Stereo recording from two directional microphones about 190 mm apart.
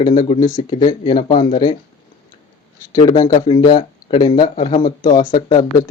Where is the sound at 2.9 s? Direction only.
20° left (ahead or behind).